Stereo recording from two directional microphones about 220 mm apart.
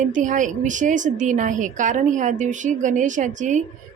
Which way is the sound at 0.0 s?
35° right (ahead or behind).